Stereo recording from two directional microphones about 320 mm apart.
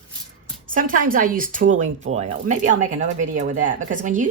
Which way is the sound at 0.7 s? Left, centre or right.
Right.